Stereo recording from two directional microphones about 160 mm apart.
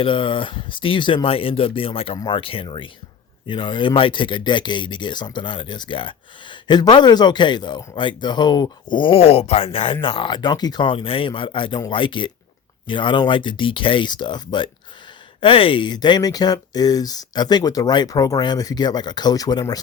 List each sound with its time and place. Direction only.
0.0 s speech: 30° left (ahead or behind)